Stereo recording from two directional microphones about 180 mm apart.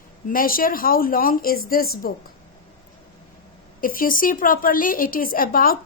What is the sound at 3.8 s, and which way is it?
A woman's voice, 50° left (ahead or behind).